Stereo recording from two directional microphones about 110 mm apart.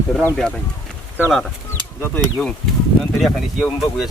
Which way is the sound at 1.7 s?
25° left (ahead or behind).